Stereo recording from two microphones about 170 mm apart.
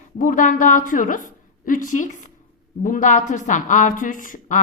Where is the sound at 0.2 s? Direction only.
50° left (ahead or behind).